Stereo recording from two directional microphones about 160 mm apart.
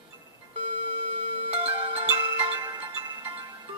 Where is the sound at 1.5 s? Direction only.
40° right (ahead or behind).